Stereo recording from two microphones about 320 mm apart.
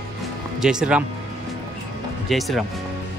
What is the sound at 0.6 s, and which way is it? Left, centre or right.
Speech, centre.